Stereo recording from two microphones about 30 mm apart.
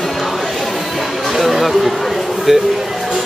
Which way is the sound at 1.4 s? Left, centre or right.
Centre.